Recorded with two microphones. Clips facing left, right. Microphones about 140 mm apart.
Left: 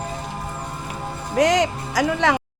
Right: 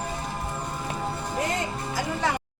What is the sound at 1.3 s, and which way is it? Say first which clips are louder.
Speech: left 13 dB; 85° left.